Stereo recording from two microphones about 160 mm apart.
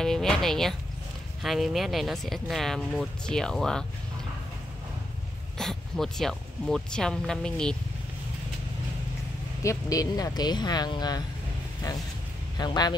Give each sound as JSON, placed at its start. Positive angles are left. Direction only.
{"t": 0.0, "sound": "speech", "side_deg": 5}
{"t": 5.6, "sound": "speech", "side_deg": 0}
{"t": 9.6, "sound": "speech", "side_deg": 20}
{"t": 12.5, "sound": "speech", "side_deg": 25}